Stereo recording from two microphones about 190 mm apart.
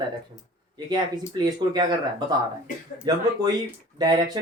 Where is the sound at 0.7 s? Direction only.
20° right (ahead or behind).